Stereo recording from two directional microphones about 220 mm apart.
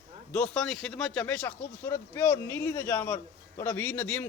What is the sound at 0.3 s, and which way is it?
A man's voice, 5° left (ahead or behind).